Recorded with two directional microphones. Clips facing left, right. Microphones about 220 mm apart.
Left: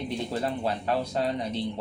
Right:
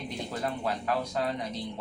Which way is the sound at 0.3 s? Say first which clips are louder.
Left 1 dB; 30° left (ahead or behind).